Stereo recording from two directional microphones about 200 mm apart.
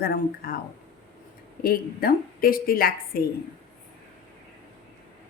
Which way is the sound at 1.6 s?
45° left (ahead or behind).